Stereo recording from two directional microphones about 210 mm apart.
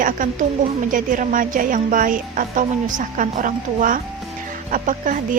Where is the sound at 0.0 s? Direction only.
40° right (ahead or behind).